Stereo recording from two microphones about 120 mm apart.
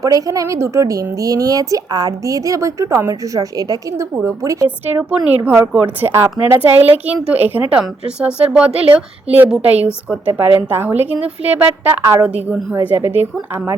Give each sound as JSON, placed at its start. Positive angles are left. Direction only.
{"t": 0.0, "sound": "speech", "side_deg": -30}
{"t": 5.7, "sound": "a woman's voice", "side_deg": -15}